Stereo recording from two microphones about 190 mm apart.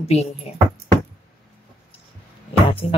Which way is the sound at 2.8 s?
35° left (ahead or behind).